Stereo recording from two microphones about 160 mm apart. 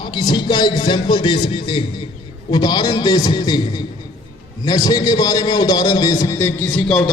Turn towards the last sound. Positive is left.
turn(degrees=5)  # may be behind; listen again after turning